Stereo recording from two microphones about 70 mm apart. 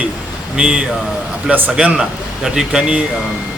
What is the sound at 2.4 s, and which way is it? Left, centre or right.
Speech, centre.